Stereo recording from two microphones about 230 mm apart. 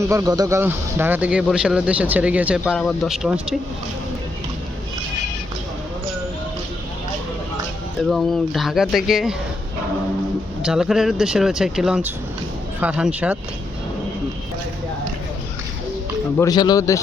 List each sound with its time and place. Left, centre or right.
0.1 s speech: centre
8.1 s speech: centre
10.6 s speech: centre
16.4 s speech: centre